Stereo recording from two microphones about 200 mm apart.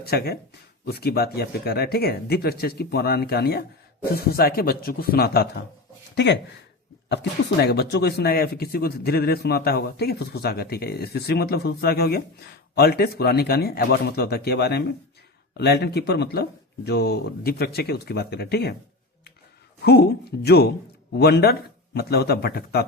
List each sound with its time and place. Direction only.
0.0 s speech: 50° left (ahead or behind)
19.8 s speech: 55° left (ahead or behind)